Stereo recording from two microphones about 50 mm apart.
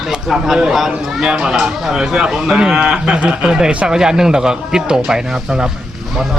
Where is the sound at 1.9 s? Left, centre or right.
Centre.